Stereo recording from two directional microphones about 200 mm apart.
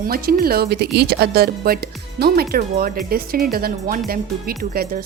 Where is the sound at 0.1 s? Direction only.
50° right (ahead or behind).